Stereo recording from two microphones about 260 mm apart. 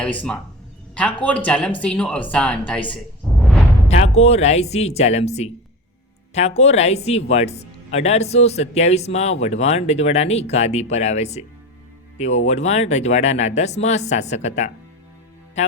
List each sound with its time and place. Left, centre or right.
0.0 s speech: centre
3.2 s music: centre
3.8 s speech: left